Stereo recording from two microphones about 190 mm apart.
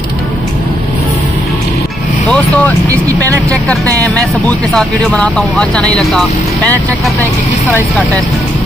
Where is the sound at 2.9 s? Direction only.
15° right (ahead or behind).